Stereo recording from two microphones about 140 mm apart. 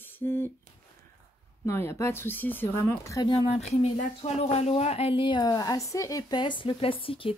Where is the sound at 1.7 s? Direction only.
20° left (ahead or behind).